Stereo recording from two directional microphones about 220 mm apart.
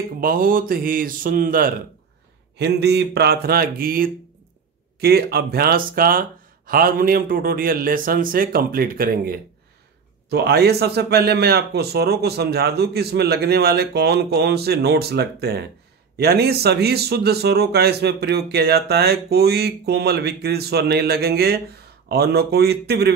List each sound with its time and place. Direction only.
0.2 s a man's voice: 40° right (ahead or behind)